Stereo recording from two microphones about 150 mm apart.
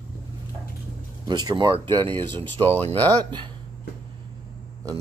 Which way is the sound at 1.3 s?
30° right (ahead or behind).